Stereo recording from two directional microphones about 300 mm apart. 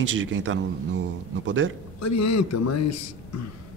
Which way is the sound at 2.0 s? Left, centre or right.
Left.